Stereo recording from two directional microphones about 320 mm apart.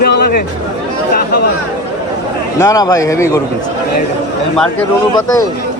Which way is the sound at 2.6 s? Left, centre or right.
Centre.